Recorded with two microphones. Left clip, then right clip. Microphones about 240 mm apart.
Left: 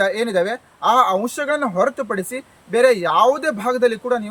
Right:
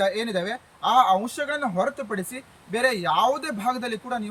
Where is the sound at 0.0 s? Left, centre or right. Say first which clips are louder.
Left 6 dB; centre.